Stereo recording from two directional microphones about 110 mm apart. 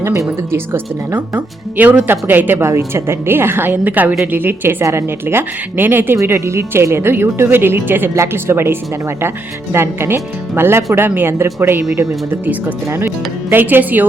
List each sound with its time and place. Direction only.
0.3 s speech: 20° right (ahead or behind)